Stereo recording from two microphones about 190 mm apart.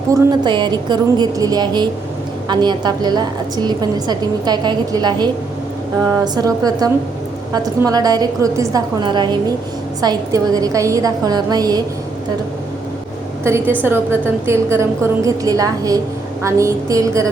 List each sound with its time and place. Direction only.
0.1 s a woman's voice: 25° right (ahead or behind)
13.4 s a woman's voice: 15° right (ahead or behind)